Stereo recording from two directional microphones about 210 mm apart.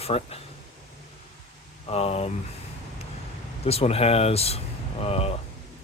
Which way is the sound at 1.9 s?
30° left (ahead or behind).